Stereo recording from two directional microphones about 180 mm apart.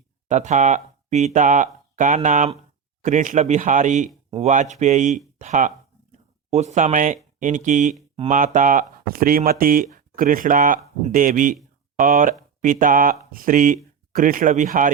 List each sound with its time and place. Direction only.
0.3 s speech: 40° right (ahead or behind)